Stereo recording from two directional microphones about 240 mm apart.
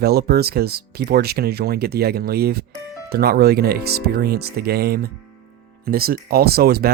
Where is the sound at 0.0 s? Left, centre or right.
Right.